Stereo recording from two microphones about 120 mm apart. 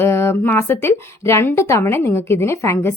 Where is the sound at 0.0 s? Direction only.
20° left (ahead or behind).